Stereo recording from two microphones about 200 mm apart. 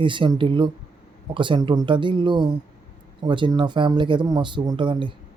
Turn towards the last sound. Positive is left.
turn(degrees=-25)  # may be behind; listen again after turning